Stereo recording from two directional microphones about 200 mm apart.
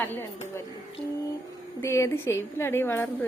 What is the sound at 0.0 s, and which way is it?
Speech, 10° left (ahead or behind).